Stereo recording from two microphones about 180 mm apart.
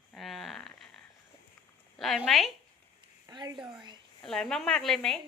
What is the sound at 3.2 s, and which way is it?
Speech, 25° right (ahead or behind).